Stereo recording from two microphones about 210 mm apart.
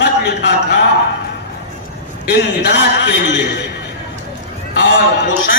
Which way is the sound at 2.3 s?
55° left (ahead or behind).